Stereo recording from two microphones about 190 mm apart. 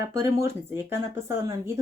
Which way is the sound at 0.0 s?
15° right (ahead or behind).